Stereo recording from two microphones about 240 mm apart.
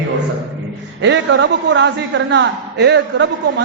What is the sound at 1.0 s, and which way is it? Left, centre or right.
A woman's voice, right.